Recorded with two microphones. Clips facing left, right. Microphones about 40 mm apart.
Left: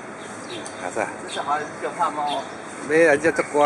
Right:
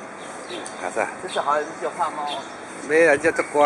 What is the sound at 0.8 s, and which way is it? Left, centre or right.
Speech, centre.